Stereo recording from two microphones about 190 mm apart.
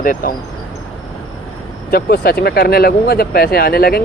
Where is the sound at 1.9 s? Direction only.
55° left (ahead or behind).